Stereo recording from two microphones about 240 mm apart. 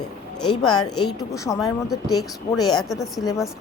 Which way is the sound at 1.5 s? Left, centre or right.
Centre.